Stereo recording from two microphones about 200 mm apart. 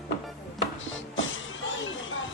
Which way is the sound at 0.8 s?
75° left (ahead or behind).